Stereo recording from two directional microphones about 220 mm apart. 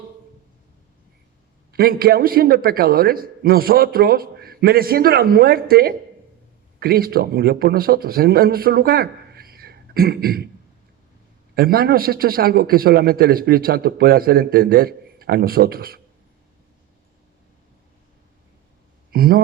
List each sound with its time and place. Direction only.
1.7 s a man's voice: 40° right (ahead or behind)
11.5 s a man's voice: 45° right (ahead or behind)
19.1 s a sound: 40° right (ahead or behind)